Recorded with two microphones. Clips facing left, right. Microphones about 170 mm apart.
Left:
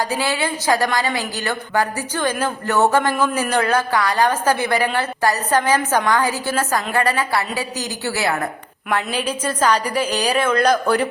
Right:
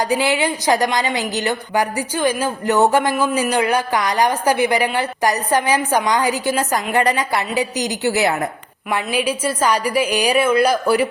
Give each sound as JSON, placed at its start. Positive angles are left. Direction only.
{"t": 0.0, "sound": "a woman's voice", "side_deg": -15}